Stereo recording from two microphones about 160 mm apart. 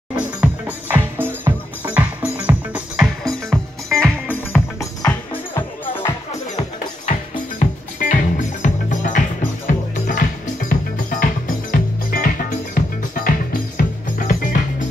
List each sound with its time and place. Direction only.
0.1 s music: 10° right (ahead or behind)
3.3 s music: 5° left (ahead or behind)
7.1 s music: 55° left (ahead or behind)